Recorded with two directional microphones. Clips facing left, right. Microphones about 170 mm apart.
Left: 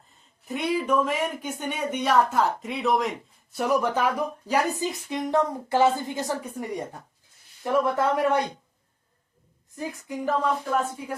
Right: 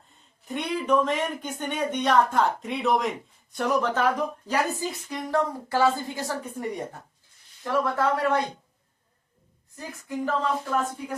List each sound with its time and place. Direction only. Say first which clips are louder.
0.4 s speech: left 2 dB; 5° left (ahead or behind); by 6.3 s 20° left (ahead or behind)
7.6 s speech: left 2 dB; 15° left (ahead or behind)
9.7 s speech: left 1 dB; 15° left (ahead or behind)